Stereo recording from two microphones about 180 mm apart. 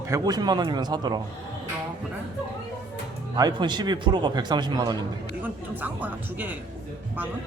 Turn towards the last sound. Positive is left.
turn(degrees=-10)  # may be behind; listen again after turning